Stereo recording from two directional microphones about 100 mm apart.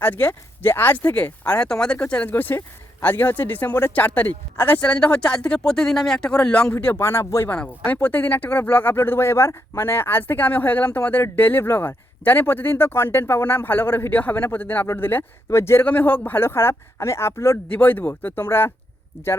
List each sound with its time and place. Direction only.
0.0 s speech: 20° left (ahead or behind)
6.9 s speech: 25° left (ahead or behind)
7.5 s speech: 15° left (ahead or behind)